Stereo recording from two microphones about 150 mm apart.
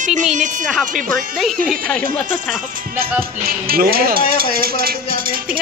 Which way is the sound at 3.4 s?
85° right.